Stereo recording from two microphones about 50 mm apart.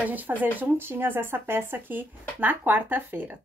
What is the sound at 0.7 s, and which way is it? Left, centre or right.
A woman's voice, right.